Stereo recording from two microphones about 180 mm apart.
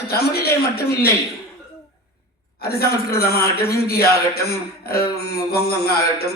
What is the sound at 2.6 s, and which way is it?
A man's voice, 60° left (ahead or behind).